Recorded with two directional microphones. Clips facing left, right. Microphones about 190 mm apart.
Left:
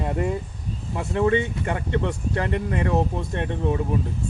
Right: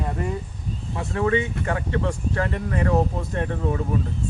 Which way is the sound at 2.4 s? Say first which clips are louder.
Left 2 dB; 20° left (ahead or behind).